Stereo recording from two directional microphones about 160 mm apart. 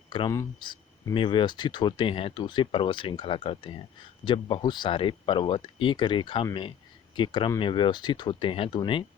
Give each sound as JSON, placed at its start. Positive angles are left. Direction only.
{"t": 0.1, "sound": "speech", "side_deg": 25}